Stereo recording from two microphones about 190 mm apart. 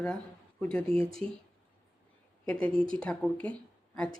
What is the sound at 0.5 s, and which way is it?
Speech, 5° left (ahead or behind).